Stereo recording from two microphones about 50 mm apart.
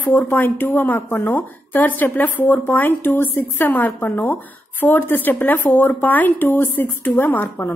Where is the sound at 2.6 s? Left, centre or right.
Left.